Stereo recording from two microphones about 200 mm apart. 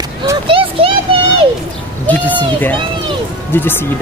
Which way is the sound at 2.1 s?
10° left (ahead or behind).